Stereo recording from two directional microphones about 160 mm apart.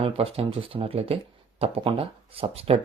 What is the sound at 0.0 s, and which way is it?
Speech, 35° right (ahead or behind).